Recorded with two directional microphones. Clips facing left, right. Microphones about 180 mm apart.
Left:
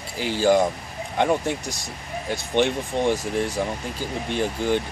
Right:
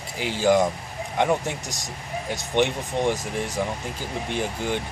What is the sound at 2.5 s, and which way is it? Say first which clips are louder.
Speech: left 1 dB; 15° right (ahead or behind).